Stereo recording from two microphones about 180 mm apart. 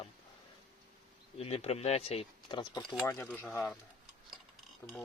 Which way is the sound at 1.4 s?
35° left (ahead or behind).